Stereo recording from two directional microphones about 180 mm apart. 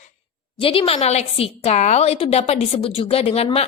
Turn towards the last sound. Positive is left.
turn(degrees=35)  # may be behind; listen again after turning